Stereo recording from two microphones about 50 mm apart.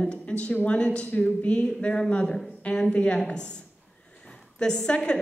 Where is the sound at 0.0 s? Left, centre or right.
Centre.